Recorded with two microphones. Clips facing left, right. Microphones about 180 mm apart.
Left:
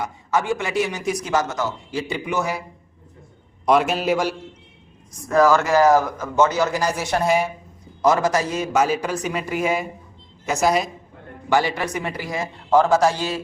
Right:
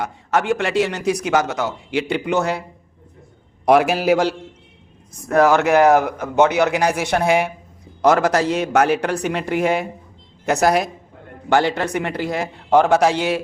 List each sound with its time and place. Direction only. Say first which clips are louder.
0.0 s speech: right 2 dB; 70° right (ahead or behind)
3.7 s a man's voice: right 4 dB; 65° right (ahead or behind)